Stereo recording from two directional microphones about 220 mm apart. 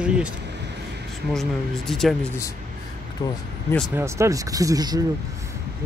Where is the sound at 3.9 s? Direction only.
10° right (ahead or behind).